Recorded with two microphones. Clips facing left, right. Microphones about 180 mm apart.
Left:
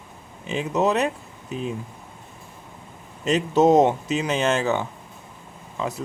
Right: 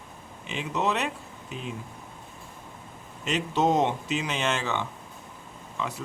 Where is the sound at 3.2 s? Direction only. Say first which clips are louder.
Left 7 dB; 40° left (ahead or behind).